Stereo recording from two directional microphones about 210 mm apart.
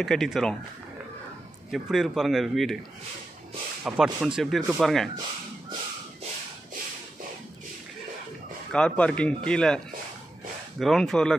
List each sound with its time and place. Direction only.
0.0 s speech: centre (ahead or behind)
1.7 s speech: centre (ahead or behind)
3.8 s speech: 5° right (ahead or behind)
8.7 s speech: 5° left (ahead or behind)
10.8 s speech: centre (ahead or behind)